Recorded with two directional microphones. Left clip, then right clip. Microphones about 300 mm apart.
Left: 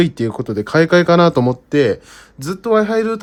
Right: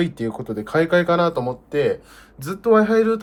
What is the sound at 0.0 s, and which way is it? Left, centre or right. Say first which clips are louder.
Speech: left 7 dB; left.